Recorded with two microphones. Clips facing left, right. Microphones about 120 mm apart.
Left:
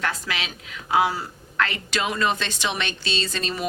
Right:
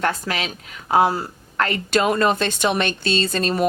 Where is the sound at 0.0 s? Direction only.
40° right (ahead or behind).